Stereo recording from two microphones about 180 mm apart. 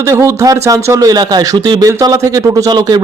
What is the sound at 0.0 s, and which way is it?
Speech, 15° right (ahead or behind).